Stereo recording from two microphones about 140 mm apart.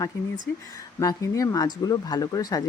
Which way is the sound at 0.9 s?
25° left (ahead or behind).